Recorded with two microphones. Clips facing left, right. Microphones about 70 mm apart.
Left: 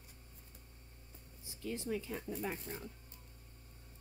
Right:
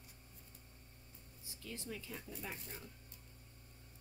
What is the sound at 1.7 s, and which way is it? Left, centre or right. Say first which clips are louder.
Speech: left 8 dB; left.